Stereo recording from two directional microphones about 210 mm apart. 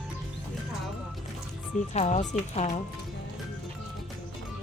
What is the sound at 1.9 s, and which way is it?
Speech, 35° left (ahead or behind).